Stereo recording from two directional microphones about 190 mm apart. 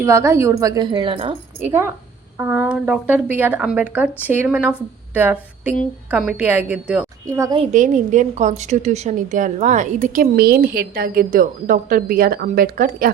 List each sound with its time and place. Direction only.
0.0 s speech: 15° right (ahead or behind)
1.5 s speech: 10° right (ahead or behind)
7.6 s a woman's voice: 40° right (ahead or behind)